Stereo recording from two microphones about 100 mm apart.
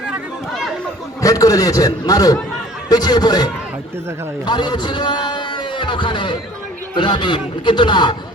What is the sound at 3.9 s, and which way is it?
Speech, 25° right (ahead or behind).